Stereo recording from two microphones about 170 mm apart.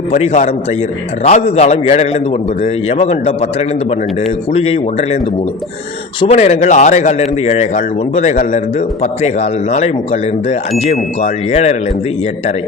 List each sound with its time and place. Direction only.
0.1 s speech: 40° left (ahead or behind)
4.5 s speech: 35° left (ahead or behind)
6.1 s a man's voice: 40° left (ahead or behind)